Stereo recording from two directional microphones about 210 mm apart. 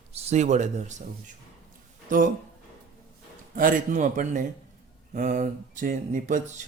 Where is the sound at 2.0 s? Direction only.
40° right (ahead or behind).